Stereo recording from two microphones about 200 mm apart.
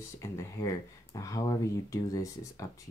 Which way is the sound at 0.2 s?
15° left (ahead or behind).